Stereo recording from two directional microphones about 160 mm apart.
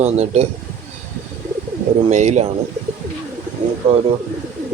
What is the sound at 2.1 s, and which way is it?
Speech, 45° right (ahead or behind).